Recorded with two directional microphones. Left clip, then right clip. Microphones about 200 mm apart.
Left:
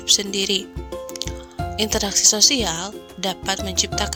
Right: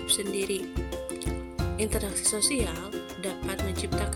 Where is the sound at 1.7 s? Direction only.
40° left (ahead or behind).